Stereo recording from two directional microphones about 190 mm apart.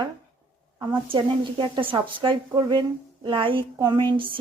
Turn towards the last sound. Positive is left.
turn(degrees=-25)  # may be behind; listen again after turning